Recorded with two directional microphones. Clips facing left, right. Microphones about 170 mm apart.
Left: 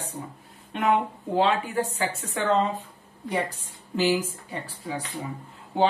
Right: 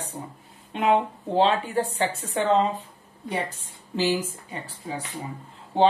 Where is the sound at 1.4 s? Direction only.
30° right (ahead or behind).